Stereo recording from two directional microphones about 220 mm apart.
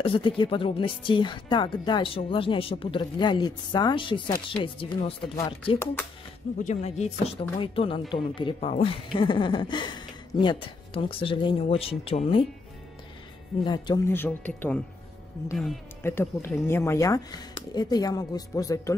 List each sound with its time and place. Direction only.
0.0 s speech: 25° left (ahead or behind)
5.4 s speech: 10° left (ahead or behind)
6.6 s speech: 30° left (ahead or behind)
13.7 s speech: 20° left (ahead or behind); by 15.8 s centre (ahead or behind)
16.0 s speech: 10° left (ahead or behind)